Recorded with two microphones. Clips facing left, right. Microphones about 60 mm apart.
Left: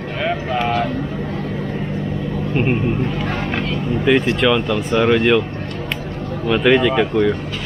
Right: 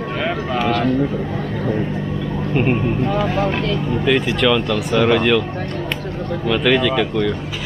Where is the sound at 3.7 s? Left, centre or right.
Centre.